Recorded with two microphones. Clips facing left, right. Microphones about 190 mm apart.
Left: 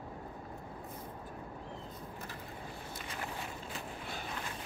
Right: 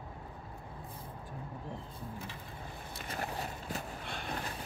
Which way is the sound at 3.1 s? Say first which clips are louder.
Right 5 dB; 40° right (ahead or behind).